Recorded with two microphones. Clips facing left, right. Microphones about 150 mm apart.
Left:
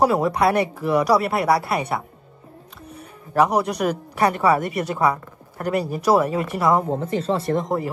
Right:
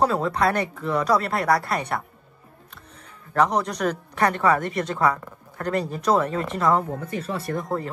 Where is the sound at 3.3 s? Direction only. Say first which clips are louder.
Left 3 dB; 10° left (ahead or behind).